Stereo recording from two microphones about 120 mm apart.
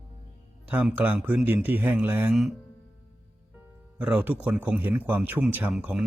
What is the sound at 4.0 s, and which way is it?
Speech, 10° right (ahead or behind).